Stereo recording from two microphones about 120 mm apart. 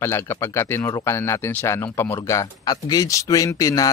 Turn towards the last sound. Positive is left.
turn(degrees=30)  # may be behind; listen again after turning